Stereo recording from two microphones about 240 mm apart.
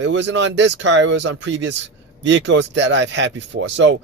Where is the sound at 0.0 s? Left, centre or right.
Right.